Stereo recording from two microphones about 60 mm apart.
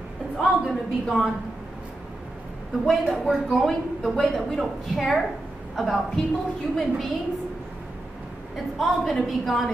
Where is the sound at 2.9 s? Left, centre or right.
Centre.